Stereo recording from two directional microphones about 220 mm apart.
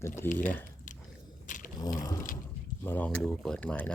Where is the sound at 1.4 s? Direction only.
35° left (ahead or behind).